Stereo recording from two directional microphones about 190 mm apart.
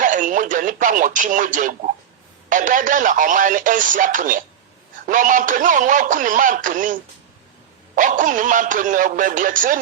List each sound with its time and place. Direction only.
0.0 s radio: 45° right (ahead or behind)
2.5 s speech: 45° right (ahead or behind)